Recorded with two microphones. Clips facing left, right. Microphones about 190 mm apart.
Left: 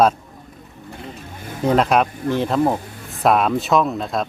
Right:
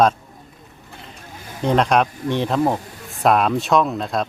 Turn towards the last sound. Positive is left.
turn(degrees=0)  # may be behind; listen again after turning